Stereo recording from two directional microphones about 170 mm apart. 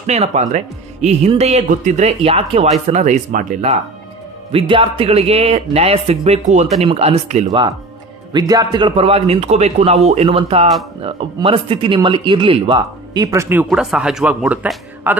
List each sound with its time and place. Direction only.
0.0 s speech: 40° right (ahead or behind)
4.5 s speech: 30° right (ahead or behind)
8.3 s speech: 20° right (ahead or behind)